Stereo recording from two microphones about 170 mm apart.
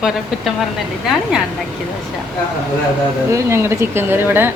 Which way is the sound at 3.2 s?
15° right (ahead or behind).